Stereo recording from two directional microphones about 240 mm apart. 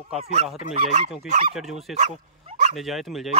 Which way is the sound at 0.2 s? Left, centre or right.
Right.